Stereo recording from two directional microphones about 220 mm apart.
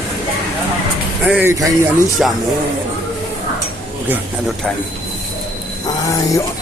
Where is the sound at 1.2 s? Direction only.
10° right (ahead or behind).